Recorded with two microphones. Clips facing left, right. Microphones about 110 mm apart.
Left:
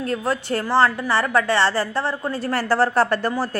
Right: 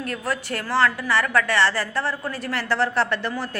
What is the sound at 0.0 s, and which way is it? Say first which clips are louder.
A woman's voice: left 4 dB; 30° left (ahead or behind).